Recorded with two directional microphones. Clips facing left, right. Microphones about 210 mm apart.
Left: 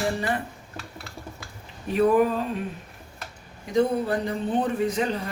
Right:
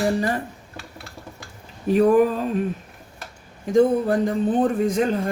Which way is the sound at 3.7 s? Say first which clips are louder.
Right 5 dB; 45° right (ahead or behind).